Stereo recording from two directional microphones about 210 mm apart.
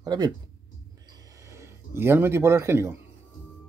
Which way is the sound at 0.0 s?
20° right (ahead or behind).